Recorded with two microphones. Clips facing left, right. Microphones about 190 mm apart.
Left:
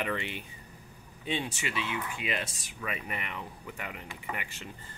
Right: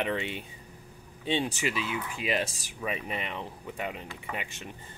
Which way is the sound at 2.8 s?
20° right (ahead or behind).